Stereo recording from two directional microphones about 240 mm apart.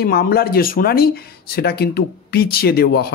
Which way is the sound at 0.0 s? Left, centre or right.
Left.